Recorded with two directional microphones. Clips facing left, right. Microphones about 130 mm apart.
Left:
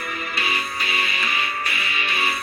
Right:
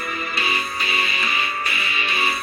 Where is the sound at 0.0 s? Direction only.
25° right (ahead or behind).